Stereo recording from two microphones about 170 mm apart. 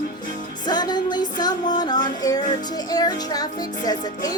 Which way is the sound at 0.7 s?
25° left (ahead or behind).